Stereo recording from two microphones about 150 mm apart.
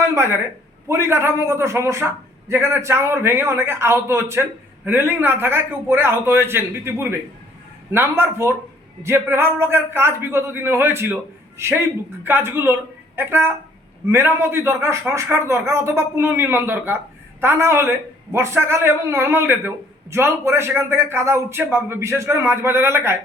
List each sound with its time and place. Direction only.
0.1 s a man's voice: 15° right (ahead or behind)